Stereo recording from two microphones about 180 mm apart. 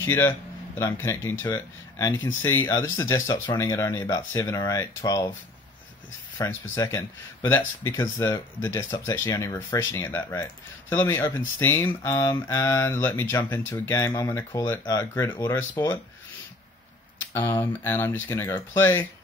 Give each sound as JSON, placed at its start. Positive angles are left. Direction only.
{"t": 0.0, "sound": "speech", "side_deg": 10}
{"t": 6.3, "sound": "speech", "side_deg": 15}
{"t": 17.3, "sound": "speech", "side_deg": 15}